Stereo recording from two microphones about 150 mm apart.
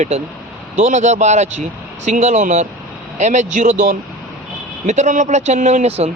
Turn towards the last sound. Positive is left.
turn(degrees=-45)  # may be behind; listen again after turning